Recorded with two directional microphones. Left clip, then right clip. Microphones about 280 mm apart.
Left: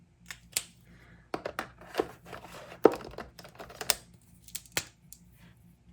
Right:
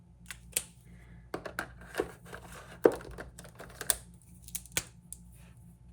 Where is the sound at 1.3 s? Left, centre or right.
Left.